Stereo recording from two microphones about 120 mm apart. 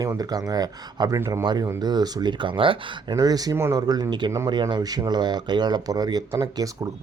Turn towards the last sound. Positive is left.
turn(degrees=-30)  # may be behind; listen again after turning